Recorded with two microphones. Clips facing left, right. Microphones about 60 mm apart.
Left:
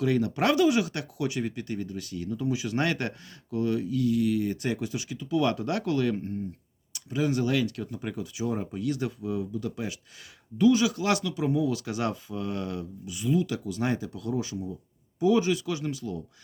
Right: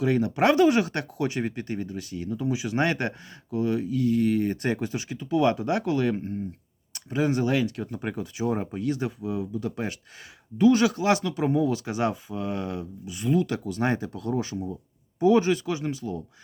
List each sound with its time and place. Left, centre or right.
0.0 s speech: right
0.5 s speech: right
6.9 s speech: right
9.7 s speech: right
10.9 s speech: right
11.9 s speech: right
13.1 s speech: right